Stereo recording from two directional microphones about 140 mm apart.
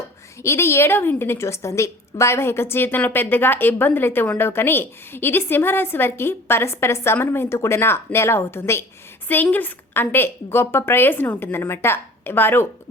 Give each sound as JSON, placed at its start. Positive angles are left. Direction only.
{"t": 0.4, "sound": "a woman's voice", "side_deg": 20}